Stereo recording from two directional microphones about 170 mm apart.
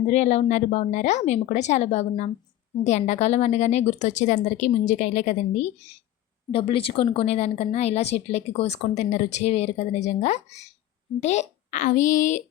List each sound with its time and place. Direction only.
0.1 s speech: 40° left (ahead or behind)